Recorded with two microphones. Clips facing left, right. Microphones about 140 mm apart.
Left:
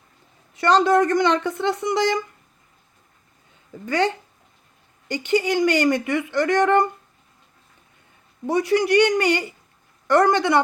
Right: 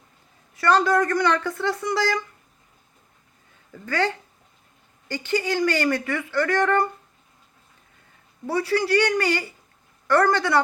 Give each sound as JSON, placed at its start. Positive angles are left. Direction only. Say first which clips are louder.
{"t": 0.5, "sound": "speech", "louder": "left 3 dB", "side_deg": 20}
{"t": 3.7, "sound": "a woman's voice", "louder": "left 3 dB", "side_deg": 20}
{"t": 8.4, "sound": "speech", "louder": "left 3 dB", "side_deg": 20}